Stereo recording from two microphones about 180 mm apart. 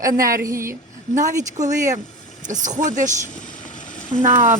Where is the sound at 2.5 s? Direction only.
45° right (ahead or behind).